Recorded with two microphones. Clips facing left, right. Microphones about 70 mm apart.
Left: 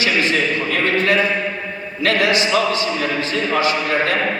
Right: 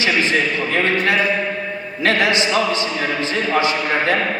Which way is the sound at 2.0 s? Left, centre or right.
Right.